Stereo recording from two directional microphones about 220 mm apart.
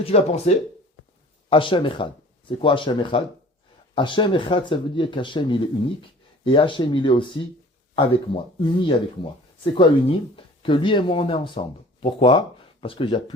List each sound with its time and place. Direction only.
0.0 s speech: 30° left (ahead or behind)